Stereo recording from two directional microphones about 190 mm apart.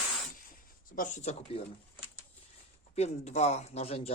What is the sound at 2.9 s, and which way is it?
Speech, 35° left (ahead or behind).